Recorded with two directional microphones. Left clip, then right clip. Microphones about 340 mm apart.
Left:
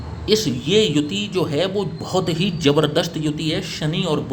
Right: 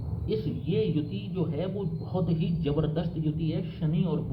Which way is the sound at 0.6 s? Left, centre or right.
Left.